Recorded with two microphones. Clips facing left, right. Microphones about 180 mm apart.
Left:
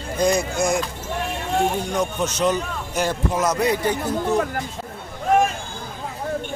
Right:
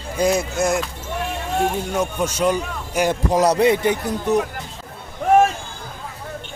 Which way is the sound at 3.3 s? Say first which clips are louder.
Right 7 dB; 35° right (ahead or behind).